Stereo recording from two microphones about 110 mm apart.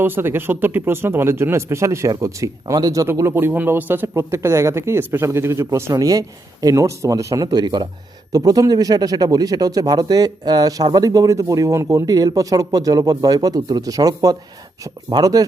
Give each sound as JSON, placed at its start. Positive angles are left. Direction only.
{"t": 0.0, "sound": "speech", "side_deg": -20}
{"t": 7.4, "sound": "a man's voice", "side_deg": -40}